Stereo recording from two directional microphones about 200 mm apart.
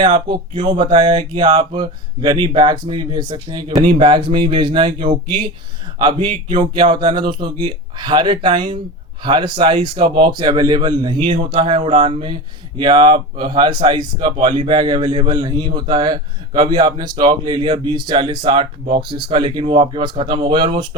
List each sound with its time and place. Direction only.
0.5 s speech: 25° right (ahead or behind)